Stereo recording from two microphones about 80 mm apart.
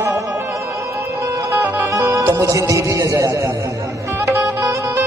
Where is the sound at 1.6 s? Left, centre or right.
Right.